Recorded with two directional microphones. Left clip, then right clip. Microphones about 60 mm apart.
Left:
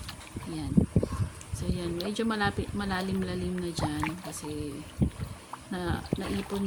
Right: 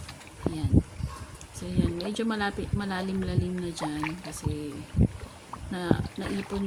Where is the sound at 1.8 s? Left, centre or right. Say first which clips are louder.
Right 1 dB; centre.